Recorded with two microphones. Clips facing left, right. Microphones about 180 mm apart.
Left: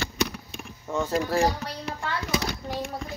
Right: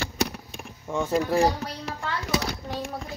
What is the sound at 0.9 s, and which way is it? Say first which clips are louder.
Speech: right 1 dB; 15° right (ahead or behind).